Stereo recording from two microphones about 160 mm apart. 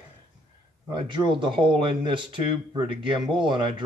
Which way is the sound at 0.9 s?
30° right (ahead or behind).